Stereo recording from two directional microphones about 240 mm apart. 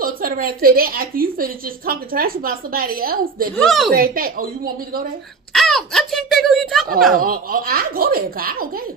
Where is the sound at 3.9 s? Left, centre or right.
Right.